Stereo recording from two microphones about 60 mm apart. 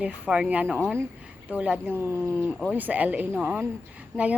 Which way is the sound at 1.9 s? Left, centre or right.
Right.